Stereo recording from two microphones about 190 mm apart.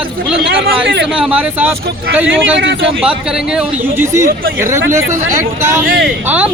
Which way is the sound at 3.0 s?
5° right (ahead or behind).